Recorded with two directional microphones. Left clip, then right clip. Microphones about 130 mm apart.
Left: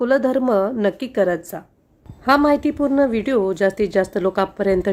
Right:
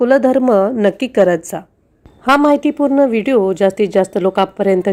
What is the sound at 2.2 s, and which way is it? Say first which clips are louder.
A woman's voice: right 4 dB; 25° right (ahead or behind).